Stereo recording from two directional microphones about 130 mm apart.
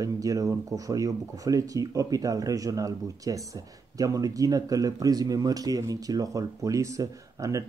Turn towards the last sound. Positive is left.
turn(degrees=-25)  # may be behind; listen again after turning